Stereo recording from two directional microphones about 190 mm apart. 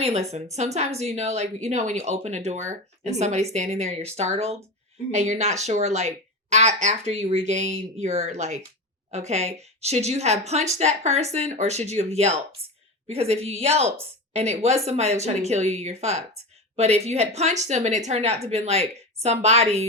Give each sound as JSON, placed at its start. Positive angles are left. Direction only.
{"t": 0.0, "sound": "speech", "side_deg": -35}